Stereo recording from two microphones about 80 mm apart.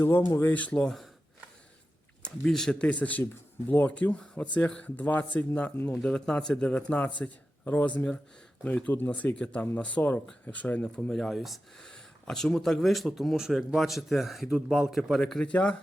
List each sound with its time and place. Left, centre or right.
0.0 s speech: left; by 0.9 s centre
2.2 s speech: centre